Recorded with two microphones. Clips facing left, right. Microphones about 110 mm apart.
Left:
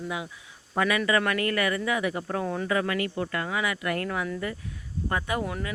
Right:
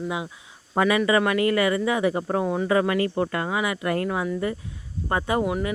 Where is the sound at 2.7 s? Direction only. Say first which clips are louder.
Right 6 dB; 30° right (ahead or behind).